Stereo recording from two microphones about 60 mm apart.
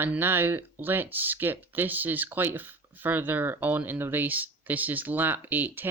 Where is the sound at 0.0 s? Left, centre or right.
Right.